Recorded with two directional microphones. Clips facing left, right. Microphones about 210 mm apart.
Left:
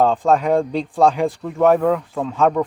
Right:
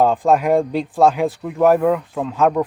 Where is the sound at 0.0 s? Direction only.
5° right (ahead or behind).